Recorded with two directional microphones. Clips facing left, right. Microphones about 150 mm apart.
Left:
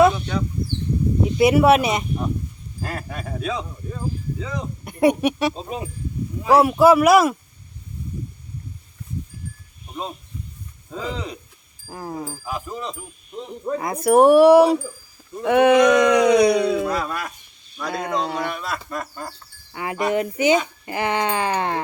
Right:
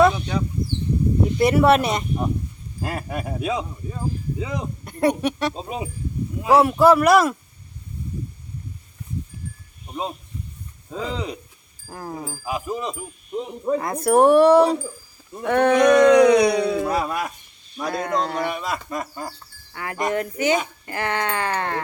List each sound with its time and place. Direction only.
0.0 s a sound: centre (ahead or behind)
1.4 s speech: 5° left (ahead or behind)
2.8 s speech: 10° right (ahead or behind)
4.9 s speech: 10° left (ahead or behind)
5.6 s speech: 5° right (ahead or behind)
10.9 s speech: centre (ahead or behind)
13.7 s speech: centre (ahead or behind)
16.8 s speech: 15° right (ahead or behind)
17.8 s speech: centre (ahead or behind)
19.7 s speech: 20° left (ahead or behind)